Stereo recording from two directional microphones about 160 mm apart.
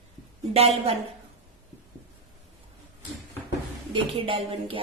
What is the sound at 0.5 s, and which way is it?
Speech, 40° right (ahead or behind).